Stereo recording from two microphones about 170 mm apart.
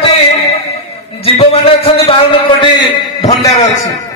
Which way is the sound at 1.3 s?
35° left (ahead or behind).